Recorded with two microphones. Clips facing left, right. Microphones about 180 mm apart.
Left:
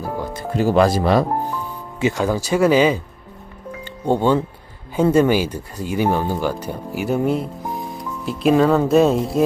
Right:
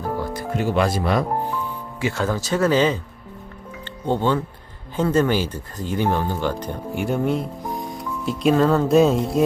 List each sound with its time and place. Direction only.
0.0 s music: 20° left (ahead or behind)
0.5 s speech: 35° left (ahead or behind)
2.0 s speech: 15° left (ahead or behind); by 9.4 s centre (ahead or behind)